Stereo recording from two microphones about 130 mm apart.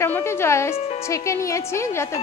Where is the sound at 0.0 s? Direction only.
20° left (ahead or behind).